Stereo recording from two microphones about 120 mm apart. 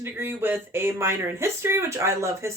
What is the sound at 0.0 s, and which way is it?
Speech, 20° right (ahead or behind).